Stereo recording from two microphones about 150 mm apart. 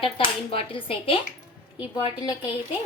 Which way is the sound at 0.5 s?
35° left (ahead or behind).